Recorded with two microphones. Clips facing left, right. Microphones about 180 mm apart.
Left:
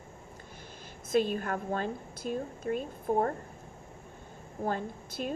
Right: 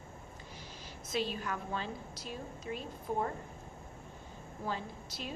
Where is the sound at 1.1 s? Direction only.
50° left (ahead or behind).